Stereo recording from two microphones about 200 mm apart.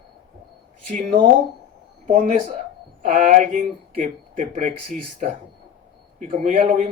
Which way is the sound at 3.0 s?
40° right (ahead or behind).